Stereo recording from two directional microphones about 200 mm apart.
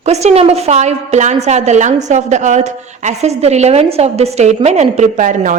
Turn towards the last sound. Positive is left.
turn(degrees=-40)  # may be behind; listen again after turning